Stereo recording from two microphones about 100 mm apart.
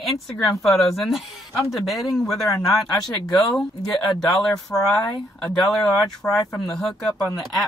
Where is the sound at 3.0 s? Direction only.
45° left (ahead or behind).